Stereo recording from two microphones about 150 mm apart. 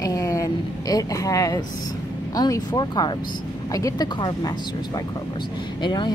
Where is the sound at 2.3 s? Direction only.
25° left (ahead or behind).